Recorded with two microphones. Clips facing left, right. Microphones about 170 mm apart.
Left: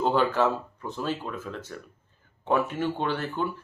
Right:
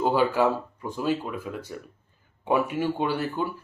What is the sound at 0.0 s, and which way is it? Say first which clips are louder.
Speech: right 1 dB; 10° right (ahead or behind).